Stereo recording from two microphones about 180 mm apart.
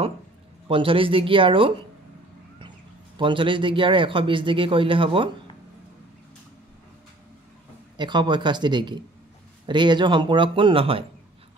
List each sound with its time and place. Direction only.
0.7 s a man's voice: 30° right (ahead or behind)
3.2 s a man's voice: 30° right (ahead or behind)
8.0 s a man's voice: 25° right (ahead or behind)